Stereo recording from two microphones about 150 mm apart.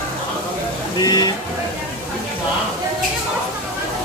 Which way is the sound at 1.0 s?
25° left (ahead or behind).